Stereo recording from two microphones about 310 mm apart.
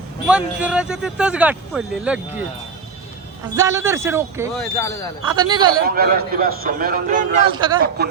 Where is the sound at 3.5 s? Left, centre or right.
Centre.